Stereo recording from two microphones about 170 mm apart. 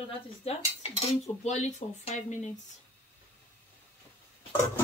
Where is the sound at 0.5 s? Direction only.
40° left (ahead or behind).